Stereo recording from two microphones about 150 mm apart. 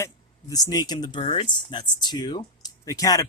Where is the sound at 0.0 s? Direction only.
25° left (ahead or behind).